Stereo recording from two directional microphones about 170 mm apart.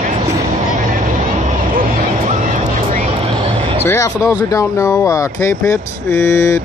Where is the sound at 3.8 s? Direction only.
15° left (ahead or behind).